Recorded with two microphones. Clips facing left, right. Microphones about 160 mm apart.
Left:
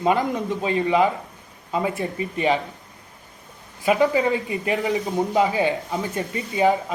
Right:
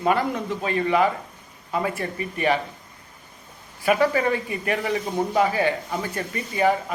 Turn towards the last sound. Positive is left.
turn(degrees=20)  # may be behind; listen again after turning